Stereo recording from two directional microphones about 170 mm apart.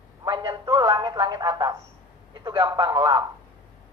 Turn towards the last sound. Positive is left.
turn(degrees=-20)  # may be behind; listen again after turning